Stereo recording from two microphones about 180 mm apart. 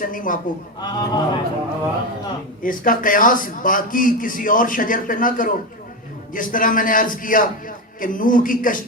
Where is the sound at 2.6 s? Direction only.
50° left (ahead or behind).